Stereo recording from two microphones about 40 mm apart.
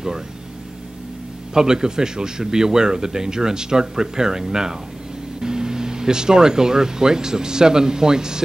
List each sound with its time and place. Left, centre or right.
1.5 s speech: centre